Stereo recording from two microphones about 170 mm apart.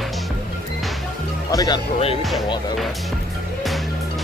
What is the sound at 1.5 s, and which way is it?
Speech, 20° left (ahead or behind).